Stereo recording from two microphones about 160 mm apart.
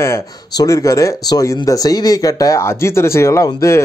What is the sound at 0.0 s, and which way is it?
Speech, 15° left (ahead or behind).